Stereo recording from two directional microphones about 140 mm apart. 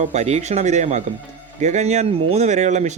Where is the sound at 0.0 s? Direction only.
55° right (ahead or behind).